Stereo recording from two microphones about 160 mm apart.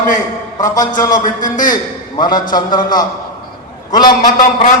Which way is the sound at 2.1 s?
25° left (ahead or behind).